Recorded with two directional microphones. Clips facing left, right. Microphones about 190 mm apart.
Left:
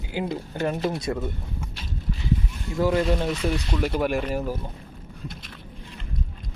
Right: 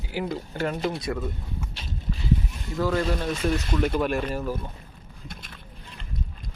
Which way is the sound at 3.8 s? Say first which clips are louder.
Left 1 dB; 10° left (ahead or behind).